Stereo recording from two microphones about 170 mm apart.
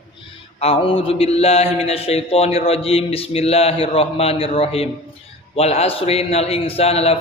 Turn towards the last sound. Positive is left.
turn(degrees=35)  # may be behind; listen again after turning